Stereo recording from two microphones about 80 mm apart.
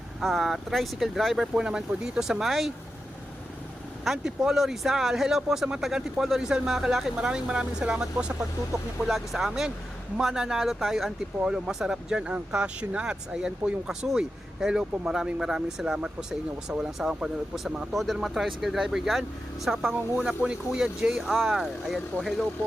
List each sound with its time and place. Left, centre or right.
0.2 s speech: centre
4.0 s speech: centre
20.1 s speech: centre